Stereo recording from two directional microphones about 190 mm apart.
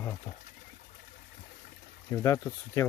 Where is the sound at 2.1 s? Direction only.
15° left (ahead or behind).